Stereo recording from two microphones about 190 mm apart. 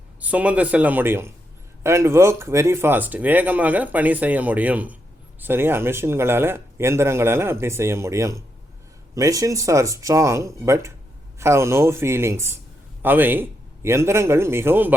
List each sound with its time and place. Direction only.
0.2 s speech: 5° right (ahead or behind)